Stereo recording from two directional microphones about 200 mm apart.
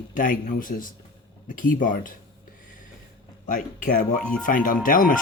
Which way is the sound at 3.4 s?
40° left (ahead or behind).